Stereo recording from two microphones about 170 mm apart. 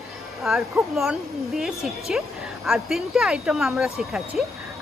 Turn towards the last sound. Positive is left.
turn(degrees=0)  # may be behind; listen again after turning